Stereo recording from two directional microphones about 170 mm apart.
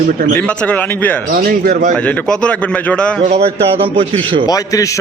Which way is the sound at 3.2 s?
35° right (ahead or behind).